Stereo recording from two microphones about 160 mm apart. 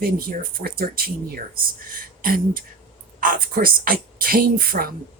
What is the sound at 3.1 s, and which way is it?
A woman's voice, 65° right (ahead or behind).